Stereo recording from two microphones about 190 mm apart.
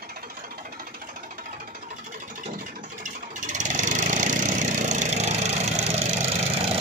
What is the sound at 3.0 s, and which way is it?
Engine, 40° right (ahead or behind).